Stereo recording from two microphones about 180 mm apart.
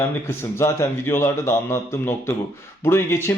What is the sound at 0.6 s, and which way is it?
Speech, 15° left (ahead or behind).